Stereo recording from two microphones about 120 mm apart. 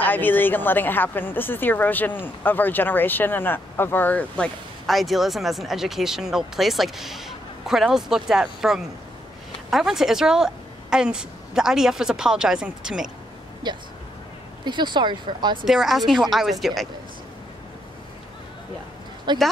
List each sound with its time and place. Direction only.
0.0 s speech: 15° left (ahead or behind)
4.8 s speech: centre (ahead or behind)
13.7 s speech: 40° right (ahead or behind)
15.6 s speech: centre (ahead or behind)
19.3 s speech: 40° right (ahead or behind)